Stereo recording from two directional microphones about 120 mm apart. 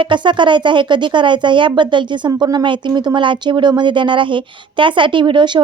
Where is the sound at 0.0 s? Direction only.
40° right (ahead or behind).